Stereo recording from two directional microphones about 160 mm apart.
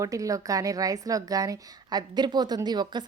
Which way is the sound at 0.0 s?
20° right (ahead or behind).